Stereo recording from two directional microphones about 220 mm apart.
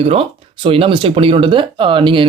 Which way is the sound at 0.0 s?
25° right (ahead or behind).